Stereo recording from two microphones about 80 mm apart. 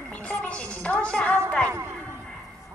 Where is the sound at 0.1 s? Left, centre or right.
Centre.